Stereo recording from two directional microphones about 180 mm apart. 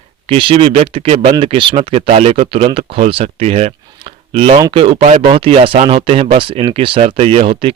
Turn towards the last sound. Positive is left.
turn(degrees=-35)  # may be behind; listen again after turning